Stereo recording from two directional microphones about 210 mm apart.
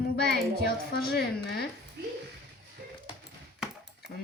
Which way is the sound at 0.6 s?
45° left (ahead or behind).